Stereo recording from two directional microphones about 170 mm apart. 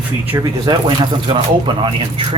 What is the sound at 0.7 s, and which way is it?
Speech, 25° right (ahead or behind).